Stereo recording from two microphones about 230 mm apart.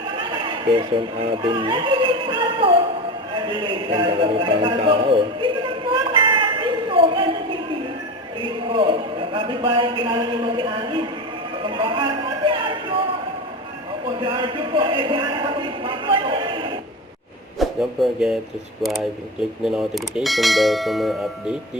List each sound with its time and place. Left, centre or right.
0.2 s speech: right
3.3 s a sound: right
8.4 s a man's voice: right
11.6 s a sound: right
14.2 s a man's voice: right
17.6 s speech: centre